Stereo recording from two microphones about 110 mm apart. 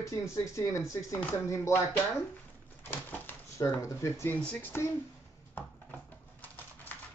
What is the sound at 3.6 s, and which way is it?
Speech, 30° left (ahead or behind).